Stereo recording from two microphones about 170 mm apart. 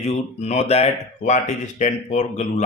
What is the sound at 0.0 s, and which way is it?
Speech, 40° left (ahead or behind).